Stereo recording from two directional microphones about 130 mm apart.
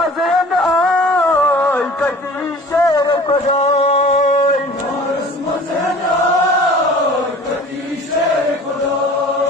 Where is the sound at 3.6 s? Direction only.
55° left (ahead or behind).